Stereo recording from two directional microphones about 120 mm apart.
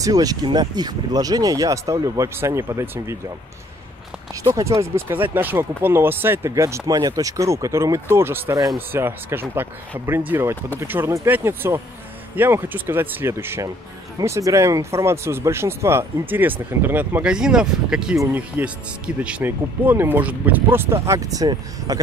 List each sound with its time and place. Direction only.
0.0 s speech: 30° right (ahead or behind)
4.4 s speech: 30° right (ahead or behind)